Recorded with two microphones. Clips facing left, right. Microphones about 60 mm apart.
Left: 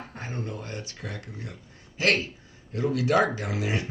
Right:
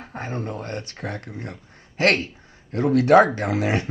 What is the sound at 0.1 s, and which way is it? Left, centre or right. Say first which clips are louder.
Speech: right 7 dB; right.